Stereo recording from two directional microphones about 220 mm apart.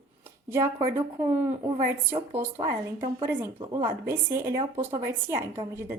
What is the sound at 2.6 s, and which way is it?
Speech, 20° right (ahead or behind).